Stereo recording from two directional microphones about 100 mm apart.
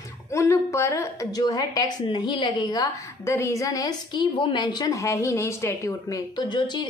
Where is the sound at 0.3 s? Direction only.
30° left (ahead or behind).